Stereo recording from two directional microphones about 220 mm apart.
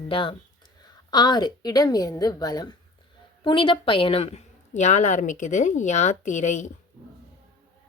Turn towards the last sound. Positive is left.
turn(degrees=35)  # may be behind; listen again after turning